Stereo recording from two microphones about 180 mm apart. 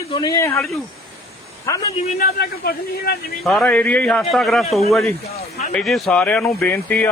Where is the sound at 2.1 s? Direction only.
60° left (ahead or behind).